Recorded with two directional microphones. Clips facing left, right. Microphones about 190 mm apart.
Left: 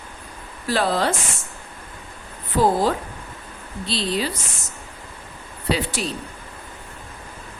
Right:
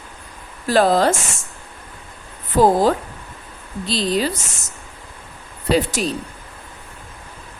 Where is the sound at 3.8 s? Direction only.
45° right (ahead or behind).